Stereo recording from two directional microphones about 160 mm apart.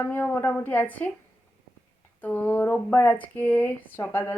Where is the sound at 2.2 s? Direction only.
10° left (ahead or behind).